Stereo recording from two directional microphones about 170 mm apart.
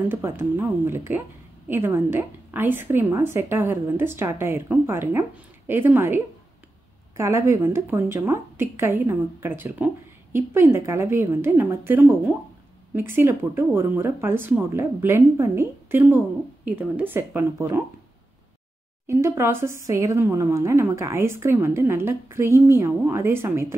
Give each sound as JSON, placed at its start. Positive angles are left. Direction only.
{"t": 0.1, "sound": "a woman's voice", "side_deg": -15}
{"t": 19.0, "sound": "a woman's voice", "side_deg": -15}